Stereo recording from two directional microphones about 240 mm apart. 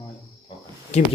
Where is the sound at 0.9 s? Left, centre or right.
Left.